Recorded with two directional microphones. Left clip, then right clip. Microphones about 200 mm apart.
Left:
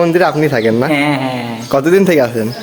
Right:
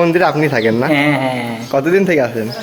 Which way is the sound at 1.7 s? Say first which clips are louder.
Left 3 dB; 25° left (ahead or behind).